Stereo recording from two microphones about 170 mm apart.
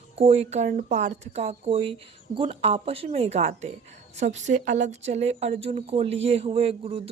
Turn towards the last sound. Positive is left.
turn(degrees=-35)  # may be behind; listen again after turning